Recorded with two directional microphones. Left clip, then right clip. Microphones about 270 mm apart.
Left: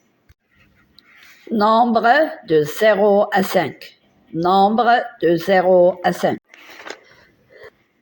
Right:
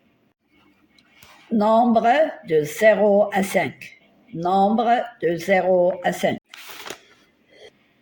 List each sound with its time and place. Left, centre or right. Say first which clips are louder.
1.5 s speech: left 2 dB; left